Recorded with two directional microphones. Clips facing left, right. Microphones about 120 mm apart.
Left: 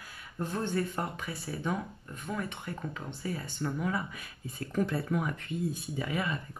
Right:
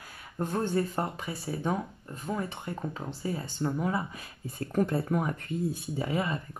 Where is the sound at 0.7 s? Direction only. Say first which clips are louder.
Right 3 dB; 25° right (ahead or behind).